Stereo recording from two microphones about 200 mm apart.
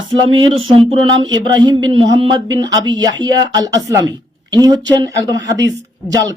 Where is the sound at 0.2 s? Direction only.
25° right (ahead or behind).